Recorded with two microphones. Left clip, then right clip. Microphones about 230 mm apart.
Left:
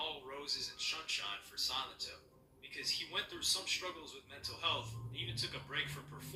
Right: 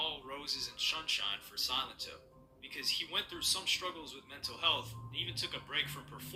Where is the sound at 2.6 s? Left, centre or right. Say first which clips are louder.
Right 3 dB; right.